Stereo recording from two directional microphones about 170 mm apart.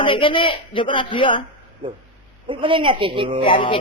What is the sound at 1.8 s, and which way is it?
Speech, 30° right (ahead or behind).